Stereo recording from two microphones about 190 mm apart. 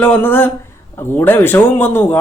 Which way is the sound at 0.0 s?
10° left (ahead or behind).